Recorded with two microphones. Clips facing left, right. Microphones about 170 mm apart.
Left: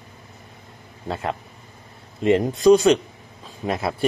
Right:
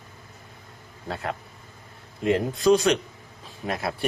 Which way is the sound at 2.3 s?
Centre (ahead or behind).